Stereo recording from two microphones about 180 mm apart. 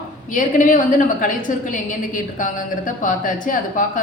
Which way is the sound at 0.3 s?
45° left (ahead or behind).